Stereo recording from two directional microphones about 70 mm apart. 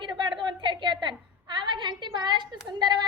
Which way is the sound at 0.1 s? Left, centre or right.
Right.